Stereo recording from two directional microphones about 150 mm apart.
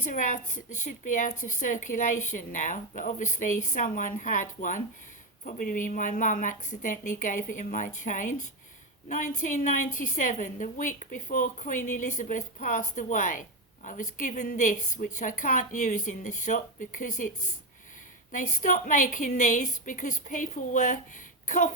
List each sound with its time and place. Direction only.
0.1 s a woman's voice: 60° left (ahead or behind)